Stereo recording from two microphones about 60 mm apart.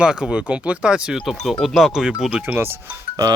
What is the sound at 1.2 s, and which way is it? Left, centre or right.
Speech, centre.